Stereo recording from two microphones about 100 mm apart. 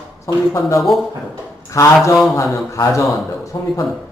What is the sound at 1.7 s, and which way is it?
A man's voice, 35° left (ahead or behind).